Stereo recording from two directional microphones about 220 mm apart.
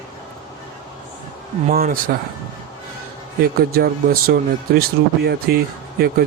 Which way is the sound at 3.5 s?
45° right (ahead or behind).